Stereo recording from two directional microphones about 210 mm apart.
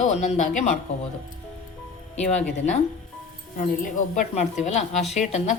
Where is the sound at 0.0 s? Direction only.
35° left (ahead or behind).